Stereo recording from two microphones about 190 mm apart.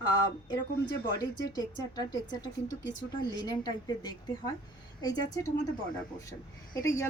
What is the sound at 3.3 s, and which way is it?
A woman's voice, 20° left (ahead or behind).